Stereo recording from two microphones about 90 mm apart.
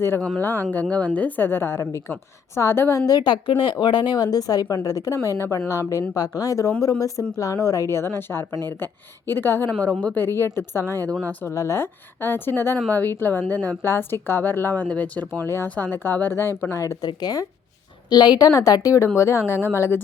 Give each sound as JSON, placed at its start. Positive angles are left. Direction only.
{"t": 0.3, "sound": "a woman's voice", "side_deg": 25}
{"t": 3.1, "sound": "a woman's voice", "side_deg": 55}
{"t": 10.0, "sound": "speech", "side_deg": 15}
{"t": 10.2, "sound": "speech", "side_deg": 30}
{"t": 11.1, "sound": "speech", "side_deg": 15}
{"t": 11.4, "sound": "speech", "side_deg": 35}
{"t": 17.0, "sound": "a woman's voice", "side_deg": 50}